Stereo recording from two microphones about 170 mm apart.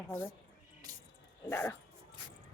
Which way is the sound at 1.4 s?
15° left (ahead or behind).